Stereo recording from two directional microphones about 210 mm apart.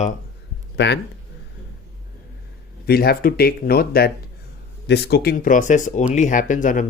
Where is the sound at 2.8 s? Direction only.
45° left (ahead or behind).